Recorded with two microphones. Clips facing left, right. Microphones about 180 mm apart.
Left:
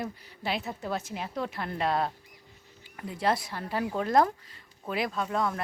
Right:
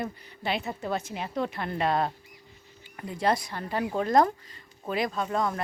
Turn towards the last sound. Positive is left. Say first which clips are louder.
# right 1 dB
turn(degrees=0)  # may be behind; listen again after turning